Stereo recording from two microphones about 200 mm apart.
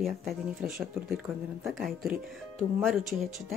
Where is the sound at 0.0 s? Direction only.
Centre (ahead or behind).